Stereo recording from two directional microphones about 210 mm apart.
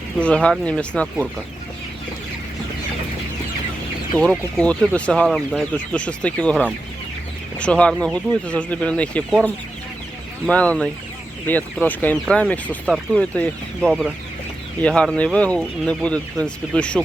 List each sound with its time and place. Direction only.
0.2 s speech: 5° left (ahead or behind)
4.1 s speech: 10° right (ahead or behind)
4.5 s speech: 5° left (ahead or behind)